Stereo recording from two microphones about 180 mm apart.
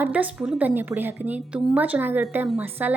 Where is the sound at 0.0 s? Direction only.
10° right (ahead or behind).